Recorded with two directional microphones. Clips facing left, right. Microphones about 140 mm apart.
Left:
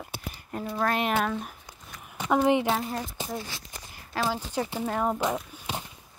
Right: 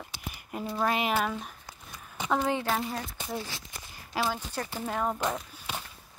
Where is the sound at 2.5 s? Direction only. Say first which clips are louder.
Left 6 dB; 20° left (ahead or behind).